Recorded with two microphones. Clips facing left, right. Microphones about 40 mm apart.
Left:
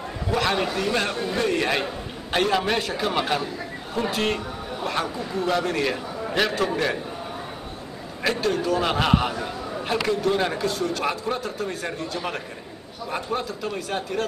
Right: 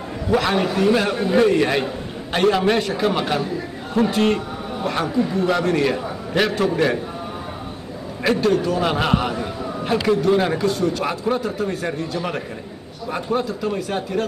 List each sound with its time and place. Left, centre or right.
0.3 s a man's voice: centre
1.1 s a man's voice: centre
1.4 s a man's voice: centre
8.2 s a man's voice: centre